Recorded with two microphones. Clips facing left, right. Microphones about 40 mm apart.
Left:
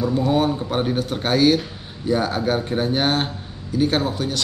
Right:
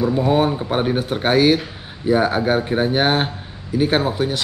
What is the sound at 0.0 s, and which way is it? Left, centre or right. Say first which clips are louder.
A man's voice: right 2 dB; centre.